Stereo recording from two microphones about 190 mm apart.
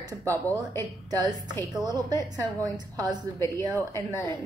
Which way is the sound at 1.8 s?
20° right (ahead or behind).